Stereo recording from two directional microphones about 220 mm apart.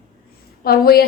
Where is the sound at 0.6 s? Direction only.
45° left (ahead or behind).